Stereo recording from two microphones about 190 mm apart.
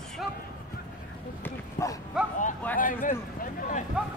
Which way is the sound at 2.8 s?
45° left (ahead or behind).